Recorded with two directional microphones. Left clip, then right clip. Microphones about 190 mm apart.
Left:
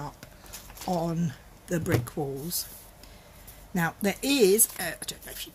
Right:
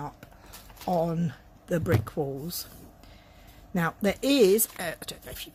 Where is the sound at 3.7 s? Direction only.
50° right (ahead or behind).